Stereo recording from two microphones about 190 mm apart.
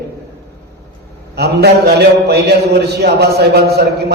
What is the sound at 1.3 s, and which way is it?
A man's voice, 60° right (ahead or behind).